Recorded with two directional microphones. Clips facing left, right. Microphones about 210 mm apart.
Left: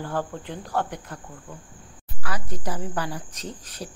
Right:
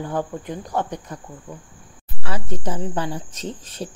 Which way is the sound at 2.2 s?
25° right (ahead or behind).